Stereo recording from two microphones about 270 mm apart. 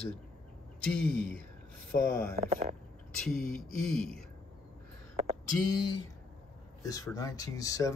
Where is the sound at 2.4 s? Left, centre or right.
Right.